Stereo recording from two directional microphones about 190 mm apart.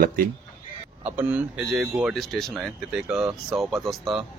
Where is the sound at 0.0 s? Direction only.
50° right (ahead or behind).